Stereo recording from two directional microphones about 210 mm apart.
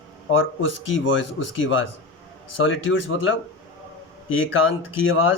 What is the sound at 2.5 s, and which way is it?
Speech, 65° left (ahead or behind).